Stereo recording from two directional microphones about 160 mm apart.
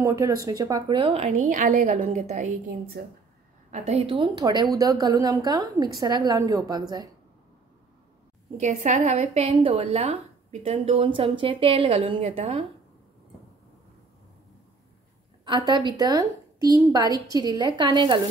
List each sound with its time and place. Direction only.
0.0 s a woman's voice: 20° right (ahead or behind); by 2.5 s 50° right (ahead or behind)
3.0 s speech: 75° right (ahead or behind)
3.7 s a woman's voice: 45° right (ahead or behind); by 7.1 s 25° right (ahead or behind)
8.5 s a woman's voice: 45° right (ahead or behind)
15.4 s a woman's voice: 25° right (ahead or behind)